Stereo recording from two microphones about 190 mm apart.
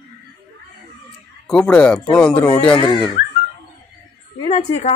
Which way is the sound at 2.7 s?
25° left (ahead or behind).